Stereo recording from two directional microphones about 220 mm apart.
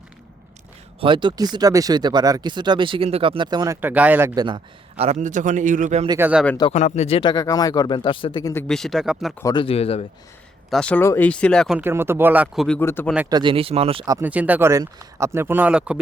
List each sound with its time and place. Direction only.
0.9 s speech: 20° right (ahead or behind)
4.4 s a man's voice: 25° right (ahead or behind)
6.1 s speech: 10° right (ahead or behind)
6.6 s speech: 30° left (ahead or behind)
8.6 s speech: centre (ahead or behind)
9.4 s speech: 20° left (ahead or behind)
10.7 s speech: 5° left (ahead or behind)
11.8 s speech: 10° right (ahead or behind)
12.6 s speech: 5° left (ahead or behind)
13.3 s speech: 20° right (ahead or behind); by 16.0 s 5° right (ahead or behind)